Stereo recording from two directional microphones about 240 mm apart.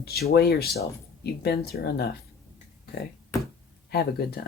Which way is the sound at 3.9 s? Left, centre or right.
Left.